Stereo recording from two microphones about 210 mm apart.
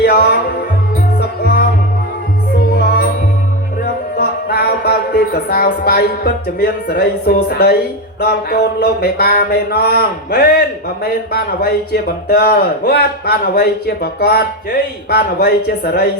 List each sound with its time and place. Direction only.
0.0 s music: 45° left (ahead or behind)
1.4 s music: 45° left (ahead or behind)
2.7 s music: 50° left (ahead or behind)
4.2 s music: 50° left (ahead or behind)
8.2 s a man's voice: 50° left (ahead or behind)